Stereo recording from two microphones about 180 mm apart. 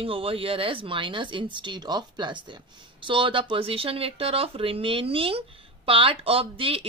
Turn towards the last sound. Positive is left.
turn(degrees=-30)  # may be behind; listen again after turning